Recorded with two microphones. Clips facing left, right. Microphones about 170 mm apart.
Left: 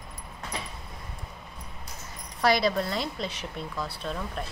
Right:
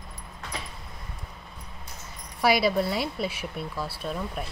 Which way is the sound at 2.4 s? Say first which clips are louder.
Right 1 dB; 10° right (ahead or behind).